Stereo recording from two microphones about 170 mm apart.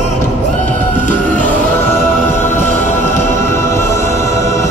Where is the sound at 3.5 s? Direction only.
15° left (ahead or behind).